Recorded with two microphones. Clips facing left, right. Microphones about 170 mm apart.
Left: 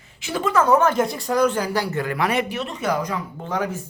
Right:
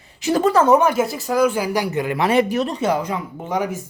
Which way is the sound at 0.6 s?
15° right (ahead or behind).